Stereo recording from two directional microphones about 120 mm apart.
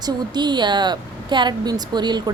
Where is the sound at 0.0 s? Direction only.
40° right (ahead or behind).